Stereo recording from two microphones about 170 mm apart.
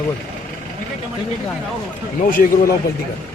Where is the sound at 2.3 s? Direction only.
60° left (ahead or behind).